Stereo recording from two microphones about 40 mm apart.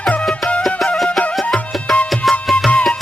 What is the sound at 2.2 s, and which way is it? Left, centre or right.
Music, centre.